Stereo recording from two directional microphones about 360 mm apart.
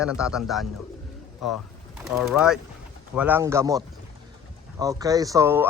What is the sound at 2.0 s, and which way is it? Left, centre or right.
A man's voice, centre.